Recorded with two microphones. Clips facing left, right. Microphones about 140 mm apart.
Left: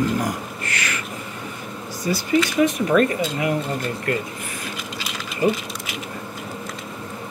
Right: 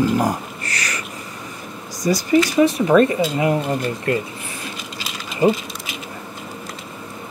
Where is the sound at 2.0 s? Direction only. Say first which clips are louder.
Right 4 dB; 40° right (ahead or behind); by 4.2 s 25° right (ahead or behind).